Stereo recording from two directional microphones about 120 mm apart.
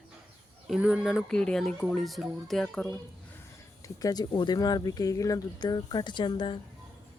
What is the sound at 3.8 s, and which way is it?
Speech, 30° left (ahead or behind).